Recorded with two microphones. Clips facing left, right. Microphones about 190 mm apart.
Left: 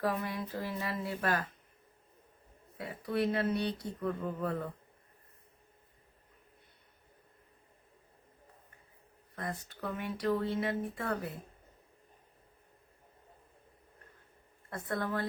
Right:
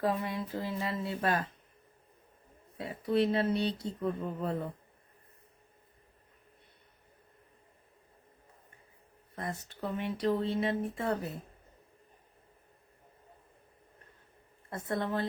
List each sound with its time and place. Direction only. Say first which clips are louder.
0.0 s speech: right 2 dB; 25° right (ahead or behind)
2.7 s speech: right 4 dB; 25° right (ahead or behind)
9.3 s speech: right 1 dB; 25° right (ahead or behind)
14.7 s speech: right 2 dB; 25° right (ahead or behind)